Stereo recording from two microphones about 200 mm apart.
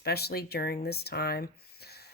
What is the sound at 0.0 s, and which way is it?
Speech, 50° left (ahead or behind).